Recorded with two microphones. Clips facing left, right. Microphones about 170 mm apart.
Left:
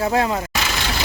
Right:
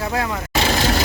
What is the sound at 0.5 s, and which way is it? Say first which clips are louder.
Vehicle: right 6 dB; 35° right (ahead or behind).